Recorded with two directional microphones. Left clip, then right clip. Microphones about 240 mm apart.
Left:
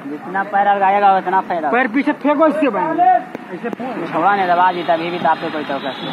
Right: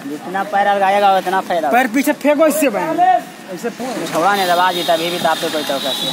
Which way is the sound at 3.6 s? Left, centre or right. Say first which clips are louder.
Right 2 dB; right.